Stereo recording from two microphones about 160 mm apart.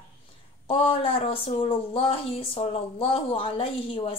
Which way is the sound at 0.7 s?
35° left (ahead or behind).